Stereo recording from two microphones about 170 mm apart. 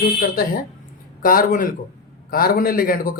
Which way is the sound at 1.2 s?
55° left (ahead or behind).